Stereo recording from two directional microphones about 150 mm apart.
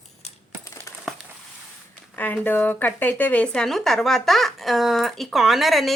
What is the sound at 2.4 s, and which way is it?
Speech, 10° left (ahead or behind).